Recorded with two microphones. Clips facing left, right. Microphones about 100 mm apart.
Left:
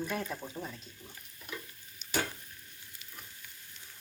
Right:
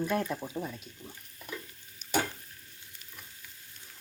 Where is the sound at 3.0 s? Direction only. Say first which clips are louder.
Left 1 dB; 45° right (ahead or behind).